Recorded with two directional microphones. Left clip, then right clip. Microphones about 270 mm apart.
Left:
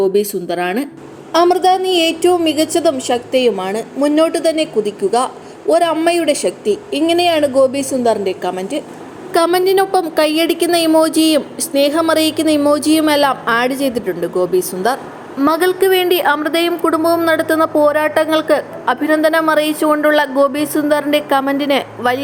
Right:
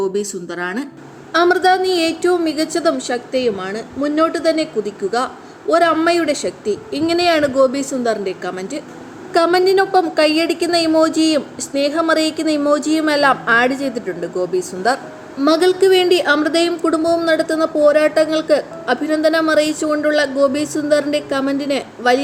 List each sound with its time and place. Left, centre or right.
0.0 s a woman's voice: centre
1.3 s a woman's voice: right
3.1 s a woman's voice: centre